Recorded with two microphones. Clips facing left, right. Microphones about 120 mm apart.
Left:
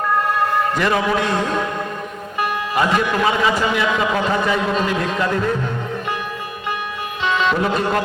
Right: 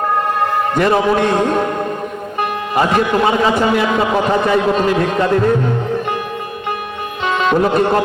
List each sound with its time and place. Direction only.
0.8 s a man's voice: 30° right (ahead or behind)
1.2 s a man's voice: 45° right (ahead or behind)
4.7 s music: 40° right (ahead or behind)
7.3 s music: 45° right (ahead or behind)